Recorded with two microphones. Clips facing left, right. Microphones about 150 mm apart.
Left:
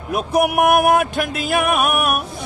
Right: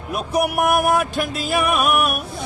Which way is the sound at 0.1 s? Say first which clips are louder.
Left 3 dB; 55° left (ahead or behind).